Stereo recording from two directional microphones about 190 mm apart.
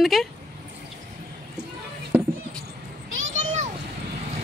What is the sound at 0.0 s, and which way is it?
Speech, centre (ahead or behind).